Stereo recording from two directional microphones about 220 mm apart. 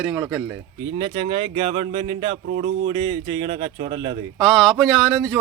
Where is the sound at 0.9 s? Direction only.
20° right (ahead or behind).